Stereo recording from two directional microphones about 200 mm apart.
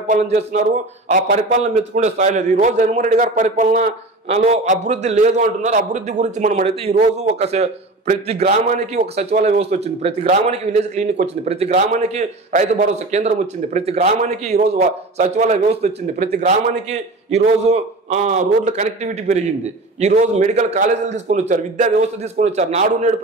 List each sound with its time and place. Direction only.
0.0 s a man's voice: 35° right (ahead or behind)